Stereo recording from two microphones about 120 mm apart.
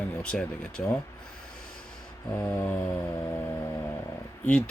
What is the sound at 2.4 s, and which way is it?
Speech, 15° left (ahead or behind).